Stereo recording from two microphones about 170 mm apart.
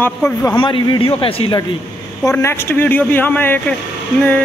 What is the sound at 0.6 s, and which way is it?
A man's voice, 30° left (ahead or behind).